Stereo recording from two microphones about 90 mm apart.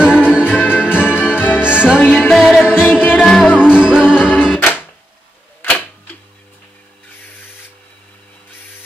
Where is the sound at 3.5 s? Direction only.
10° right (ahead or behind).